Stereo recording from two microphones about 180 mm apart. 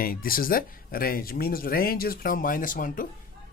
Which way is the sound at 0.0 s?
55° left (ahead or behind).